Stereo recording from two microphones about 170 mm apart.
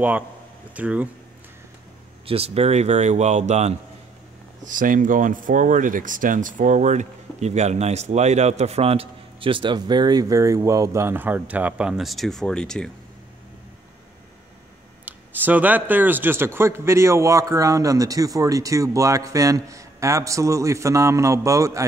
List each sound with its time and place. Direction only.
0.7 s speech: 10° right (ahead or behind)
2.2 s speech: 35° right (ahead or behind); by 12.9 s 5° left (ahead or behind)
15.0 s speech: 10° right (ahead or behind)